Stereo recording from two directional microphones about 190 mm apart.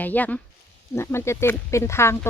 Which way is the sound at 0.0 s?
10° left (ahead or behind).